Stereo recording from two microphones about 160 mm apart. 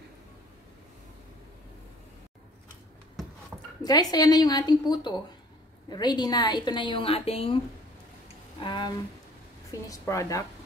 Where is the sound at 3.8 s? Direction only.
25° left (ahead or behind).